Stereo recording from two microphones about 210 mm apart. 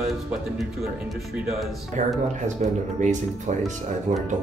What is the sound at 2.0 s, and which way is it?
Speech, 35° right (ahead or behind).